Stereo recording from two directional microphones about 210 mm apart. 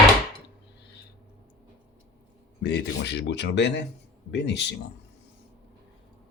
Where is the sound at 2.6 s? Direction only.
55° left (ahead or behind).